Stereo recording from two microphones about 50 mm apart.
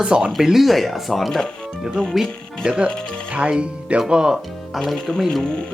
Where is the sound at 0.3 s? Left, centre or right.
Centre.